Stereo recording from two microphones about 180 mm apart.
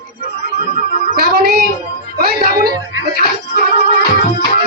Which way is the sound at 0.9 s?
45° left (ahead or behind).